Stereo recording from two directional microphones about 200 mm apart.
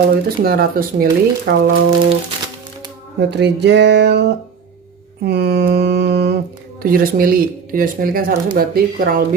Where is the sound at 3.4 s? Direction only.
60° right (ahead or behind).